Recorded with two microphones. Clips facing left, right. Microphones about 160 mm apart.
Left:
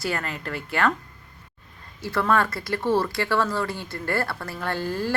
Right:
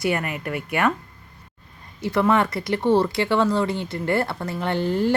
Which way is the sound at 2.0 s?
20° right (ahead or behind).